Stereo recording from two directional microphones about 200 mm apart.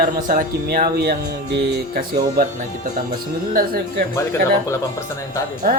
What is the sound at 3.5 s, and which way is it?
Speech, 45° right (ahead or behind).